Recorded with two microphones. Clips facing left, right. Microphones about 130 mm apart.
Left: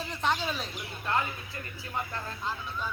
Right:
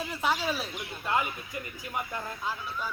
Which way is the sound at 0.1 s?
5° right (ahead or behind).